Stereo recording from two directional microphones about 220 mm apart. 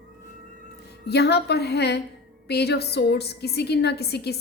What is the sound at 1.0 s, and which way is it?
A woman's voice, 50° left (ahead or behind).